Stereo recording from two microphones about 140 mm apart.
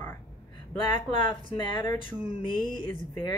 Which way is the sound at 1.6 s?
30° left (ahead or behind).